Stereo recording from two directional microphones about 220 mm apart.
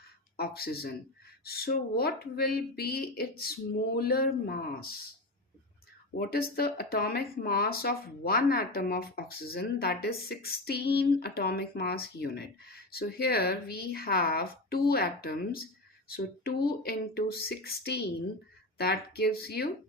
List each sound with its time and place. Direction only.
0.3 s speech: 45° left (ahead or behind)
6.1 s speech: 45° left (ahead or behind)